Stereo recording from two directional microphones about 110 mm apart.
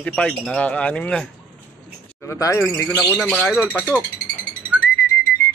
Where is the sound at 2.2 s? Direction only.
25° left (ahead or behind).